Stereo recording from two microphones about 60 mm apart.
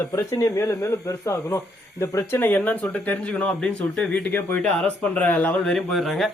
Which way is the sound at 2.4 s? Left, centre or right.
Left.